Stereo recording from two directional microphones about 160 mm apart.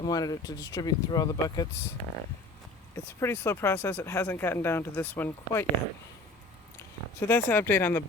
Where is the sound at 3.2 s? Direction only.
15° left (ahead or behind).